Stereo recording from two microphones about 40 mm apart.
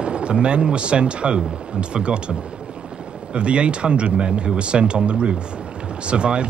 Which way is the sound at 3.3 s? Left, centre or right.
Right.